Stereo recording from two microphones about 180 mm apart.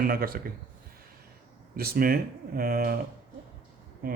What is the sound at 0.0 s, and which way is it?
Speech, 55° right (ahead or behind).